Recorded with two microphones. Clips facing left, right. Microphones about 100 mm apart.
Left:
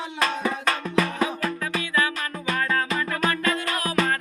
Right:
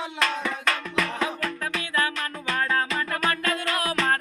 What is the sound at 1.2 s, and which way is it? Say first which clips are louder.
Music: left 2 dB; 5° left (ahead or behind).